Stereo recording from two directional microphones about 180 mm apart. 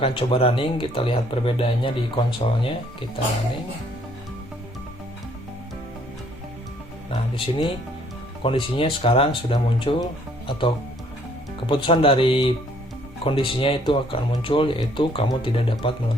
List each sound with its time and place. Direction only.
0.0 s speech: 30° left (ahead or behind)
7.1 s music: 30° left (ahead or behind)
8.4 s speech: 30° left (ahead or behind)